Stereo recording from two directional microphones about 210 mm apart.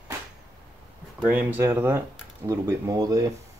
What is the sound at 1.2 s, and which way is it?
Speech, 5° right (ahead or behind).